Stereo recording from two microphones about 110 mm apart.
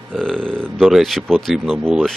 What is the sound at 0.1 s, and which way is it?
Speech, 5° left (ahead or behind).